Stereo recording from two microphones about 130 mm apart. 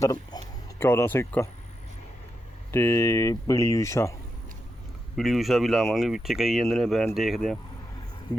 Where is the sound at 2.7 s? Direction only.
20° left (ahead or behind).